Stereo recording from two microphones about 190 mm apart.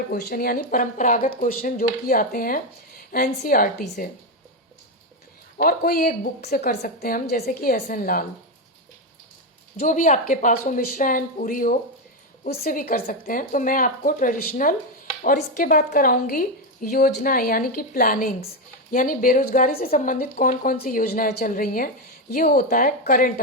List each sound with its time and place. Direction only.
0.1 s a woman's voice: 50° left (ahead or behind)
5.5 s a woman's voice: 50° left (ahead or behind)
9.8 s a woman's voice: 40° left (ahead or behind)